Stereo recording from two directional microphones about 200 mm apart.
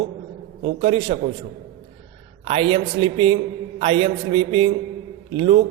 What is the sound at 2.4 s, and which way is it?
A man's voice, 25° right (ahead or behind).